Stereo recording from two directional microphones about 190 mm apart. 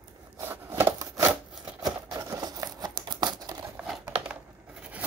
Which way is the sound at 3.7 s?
Centre (ahead or behind).